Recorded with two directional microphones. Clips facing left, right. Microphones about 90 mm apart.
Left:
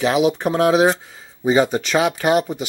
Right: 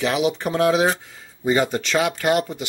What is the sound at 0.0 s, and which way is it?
Speech, 20° left (ahead or behind).